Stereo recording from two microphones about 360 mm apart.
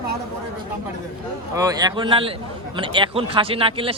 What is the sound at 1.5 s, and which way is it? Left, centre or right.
A man's voice, centre.